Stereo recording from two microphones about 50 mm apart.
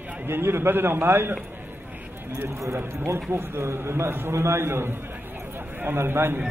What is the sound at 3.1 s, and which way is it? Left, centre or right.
A man's voice, right.